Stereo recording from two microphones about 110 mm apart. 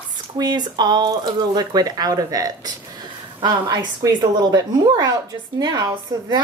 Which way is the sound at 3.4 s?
45° right (ahead or behind).